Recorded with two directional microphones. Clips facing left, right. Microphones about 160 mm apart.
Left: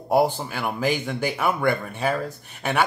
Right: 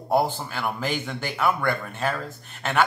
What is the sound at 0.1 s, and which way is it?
Speech, 10° left (ahead or behind).